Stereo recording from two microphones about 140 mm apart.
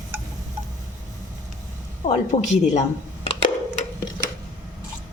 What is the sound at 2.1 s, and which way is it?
Speech, 55° left (ahead or behind).